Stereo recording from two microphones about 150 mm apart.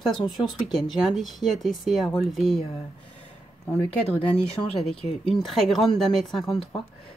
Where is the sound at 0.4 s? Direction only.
Centre (ahead or behind).